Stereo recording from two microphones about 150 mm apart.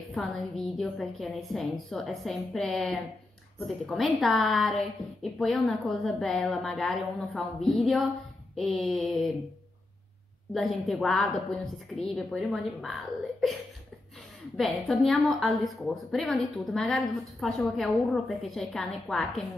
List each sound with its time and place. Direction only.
0.1 s a woman's voice: centre (ahead or behind)
10.5 s a woman's voice: centre (ahead or behind)
14.6 s a woman's voice: centre (ahead or behind)